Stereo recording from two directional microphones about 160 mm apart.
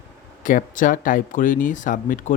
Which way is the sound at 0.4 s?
55° left (ahead or behind).